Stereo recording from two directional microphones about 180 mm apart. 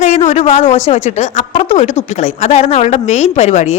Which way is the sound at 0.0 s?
40° left (ahead or behind).